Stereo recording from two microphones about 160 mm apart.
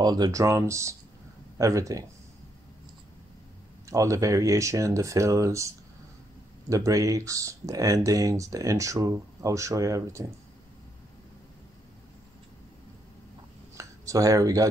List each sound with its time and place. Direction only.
0.0 s speech: 25° right (ahead or behind)
3.8 s speech: 20° right (ahead or behind)
13.7 s a sound: 20° right (ahead or behind)